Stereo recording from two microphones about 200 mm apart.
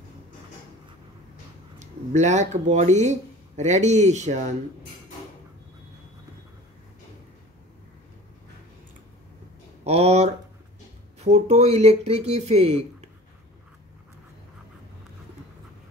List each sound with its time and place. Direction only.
1.8 s speech: 35° right (ahead or behind)
9.8 s speech: 30° right (ahead or behind)